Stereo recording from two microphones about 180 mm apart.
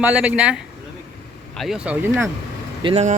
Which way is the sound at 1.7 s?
10° right (ahead or behind).